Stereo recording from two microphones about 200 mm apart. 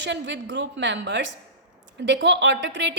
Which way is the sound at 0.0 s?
60° right (ahead or behind).